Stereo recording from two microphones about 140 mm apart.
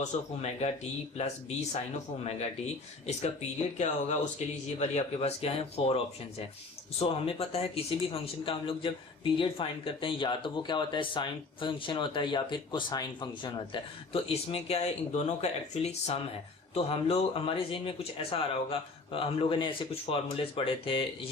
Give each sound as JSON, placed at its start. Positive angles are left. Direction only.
{"t": 0.0, "sound": "speech", "side_deg": 50}
{"t": 3.8, "sound": "speech", "side_deg": 55}
{"t": 7.0, "sound": "speech", "side_deg": 45}